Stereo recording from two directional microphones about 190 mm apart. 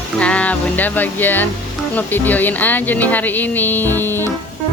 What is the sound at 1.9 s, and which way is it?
Speech, 10° left (ahead or behind).